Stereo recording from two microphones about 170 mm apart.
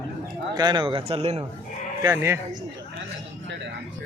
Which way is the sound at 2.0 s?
15° right (ahead or behind).